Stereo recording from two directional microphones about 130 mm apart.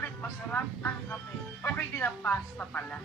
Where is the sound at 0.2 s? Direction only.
15° left (ahead or behind).